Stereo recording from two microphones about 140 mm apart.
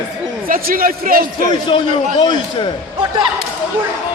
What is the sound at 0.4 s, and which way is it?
A man's voice, 80° right.